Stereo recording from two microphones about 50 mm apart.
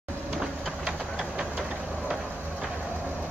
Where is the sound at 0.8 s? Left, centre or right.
Centre.